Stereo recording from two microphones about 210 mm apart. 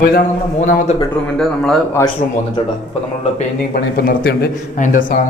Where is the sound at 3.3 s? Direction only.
40° left (ahead or behind).